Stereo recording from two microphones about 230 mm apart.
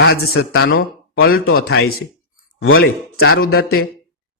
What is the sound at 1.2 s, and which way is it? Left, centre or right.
Speech, left.